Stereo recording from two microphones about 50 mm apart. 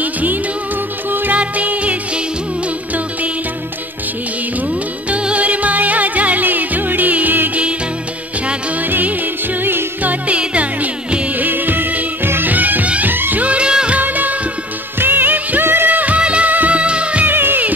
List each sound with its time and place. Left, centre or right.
0.0 s music: right
1.4 s music: right
5.1 s music: right
8.8 s music: right
10.2 s music: right
13.9 s music: right
15.0 s music of bollywood: right
15.6 s music: right
16.2 s music: right
17.3 s music: right